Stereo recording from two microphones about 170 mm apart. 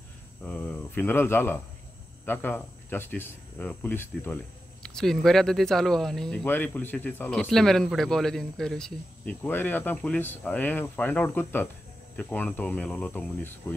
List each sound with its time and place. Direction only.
0.4 s insect: 10° left (ahead or behind)
2.2 s speech: 10° left (ahead or behind)